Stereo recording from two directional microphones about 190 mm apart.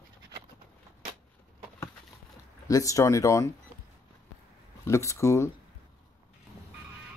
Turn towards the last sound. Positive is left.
turn(degrees=15)  # may be behind; listen again after turning